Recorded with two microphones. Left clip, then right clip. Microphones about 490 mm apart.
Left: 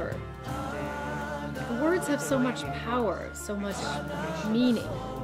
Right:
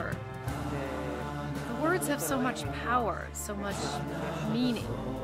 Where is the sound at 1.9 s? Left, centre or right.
Right.